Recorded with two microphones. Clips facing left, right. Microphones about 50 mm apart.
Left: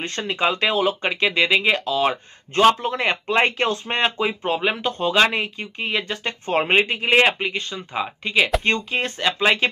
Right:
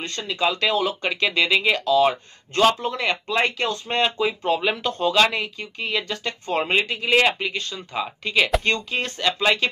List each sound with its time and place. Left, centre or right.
0.0 s speech: left
3.9 s speech: left